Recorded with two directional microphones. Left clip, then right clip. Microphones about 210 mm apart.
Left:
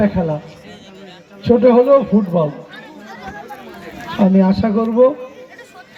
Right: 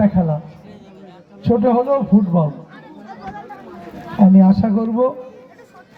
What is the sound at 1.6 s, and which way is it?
Speech, 60° right (ahead or behind).